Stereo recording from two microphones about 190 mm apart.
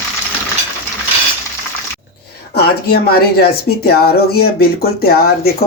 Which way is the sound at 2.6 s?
55° left (ahead or behind).